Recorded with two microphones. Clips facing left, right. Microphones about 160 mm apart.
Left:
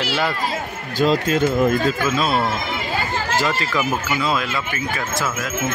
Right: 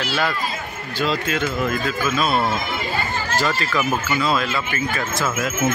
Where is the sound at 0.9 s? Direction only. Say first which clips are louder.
Left 5 dB; 45° left (ahead or behind).